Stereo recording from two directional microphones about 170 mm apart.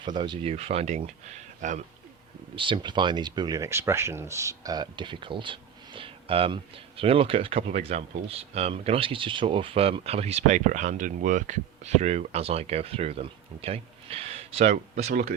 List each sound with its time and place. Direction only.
0.0 s speech: 30° right (ahead or behind); by 1.8 s 45° right (ahead or behind)
2.6 s speech: 30° right (ahead or behind)